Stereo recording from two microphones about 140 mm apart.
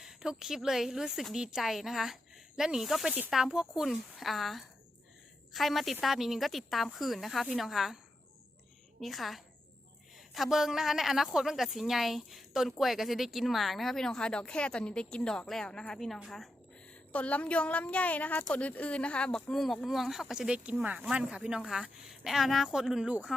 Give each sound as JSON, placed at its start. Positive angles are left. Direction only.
{"t": 0.0, "sound": "a woman's voice", "side_deg": -5}
{"t": 9.0, "sound": "a woman's voice", "side_deg": 0}
{"t": 17.1, "sound": "a woman's voice", "side_deg": 10}